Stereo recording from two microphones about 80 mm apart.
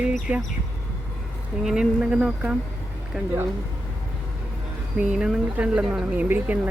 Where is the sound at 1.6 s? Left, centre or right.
Centre.